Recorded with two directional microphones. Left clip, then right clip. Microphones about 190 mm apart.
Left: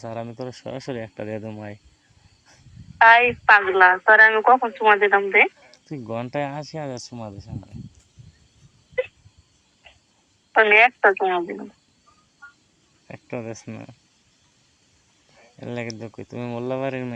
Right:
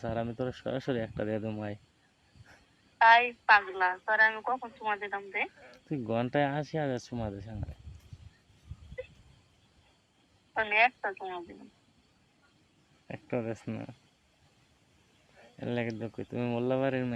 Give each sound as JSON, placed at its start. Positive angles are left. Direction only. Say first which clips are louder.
{"t": 0.0, "sound": "speech", "louder": "left 2 dB", "side_deg": 0}
{"t": 3.0, "sound": "a woman's voice", "louder": "left 8 dB", "side_deg": 40}
{"t": 5.5, "sound": "speech", "louder": "left 2 dB", "side_deg": 5}
{"t": 10.5, "sound": "a woman's voice", "louder": "left 12 dB", "side_deg": 40}
{"t": 13.1, "sound": "speech", "louder": "left 2 dB", "side_deg": 5}
{"t": 15.4, "sound": "speech", "louder": "left 3 dB", "side_deg": 5}